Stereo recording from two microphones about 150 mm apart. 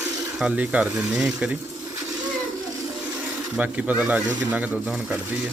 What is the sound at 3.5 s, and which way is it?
Speech, 10° right (ahead or behind).